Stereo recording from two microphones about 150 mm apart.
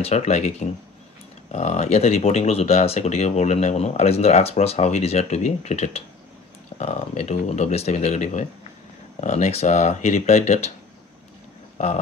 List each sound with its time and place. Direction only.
0.0 s speech: 45° left (ahead or behind)